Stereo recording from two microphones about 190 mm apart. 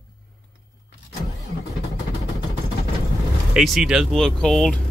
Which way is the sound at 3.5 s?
Centre (ahead or behind).